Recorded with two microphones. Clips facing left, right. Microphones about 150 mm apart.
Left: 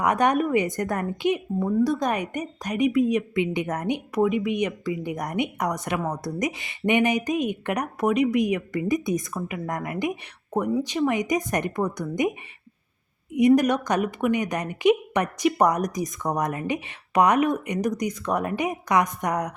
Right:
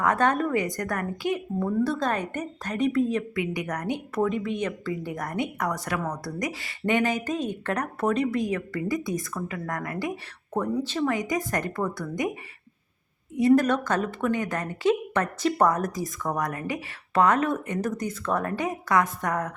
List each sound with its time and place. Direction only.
0.0 s a woman's voice: 15° left (ahead or behind)
13.6 s a woman's voice: 15° left (ahead or behind)